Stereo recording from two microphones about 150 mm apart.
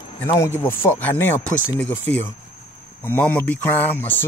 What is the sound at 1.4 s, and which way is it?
Speech, 60° left (ahead or behind).